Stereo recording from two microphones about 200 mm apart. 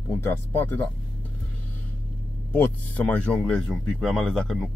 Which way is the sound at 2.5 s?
10° left (ahead or behind).